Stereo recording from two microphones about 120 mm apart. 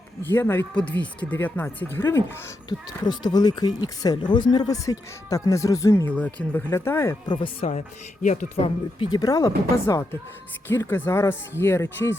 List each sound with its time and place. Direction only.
0.3 s speech: 15° left (ahead or behind)
2.6 s speech: 35° left (ahead or behind)
6.1 s speech: 10° left (ahead or behind)
7.3 s speech: 45° left (ahead or behind)
8.2 s speech: 85° left
8.6 s speech: 40° left (ahead or behind); by 12.1 s 20° left (ahead or behind)